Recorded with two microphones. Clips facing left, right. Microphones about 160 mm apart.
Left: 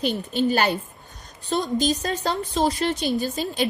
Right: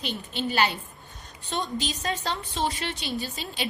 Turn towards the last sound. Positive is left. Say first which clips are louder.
# left 8 dB
turn(degrees=45)  # may be behind; listen again after turning